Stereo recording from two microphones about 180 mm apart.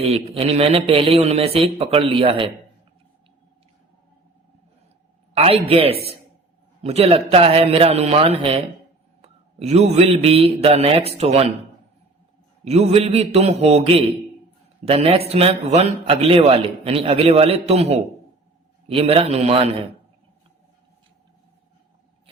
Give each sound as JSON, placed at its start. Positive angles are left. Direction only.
{"t": 0.0, "sound": "a man's voice", "side_deg": -35}
{"t": 5.3, "sound": "a man's voice", "side_deg": -35}
{"t": 12.6, "sound": "a man's voice", "side_deg": -35}